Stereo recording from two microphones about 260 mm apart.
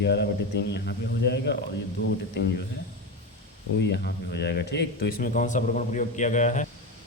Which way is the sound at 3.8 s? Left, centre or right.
Left.